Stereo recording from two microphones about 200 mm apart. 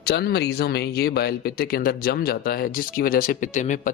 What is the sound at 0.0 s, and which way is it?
Speech, 55° left (ahead or behind).